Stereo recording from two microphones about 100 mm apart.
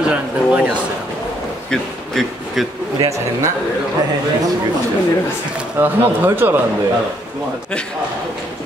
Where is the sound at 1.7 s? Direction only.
5° left (ahead or behind).